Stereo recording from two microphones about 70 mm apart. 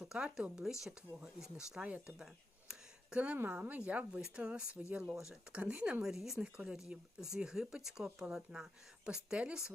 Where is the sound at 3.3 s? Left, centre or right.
Right.